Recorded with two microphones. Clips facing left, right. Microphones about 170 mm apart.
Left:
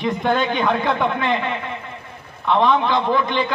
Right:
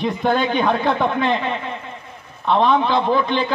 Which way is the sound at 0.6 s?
15° right (ahead or behind).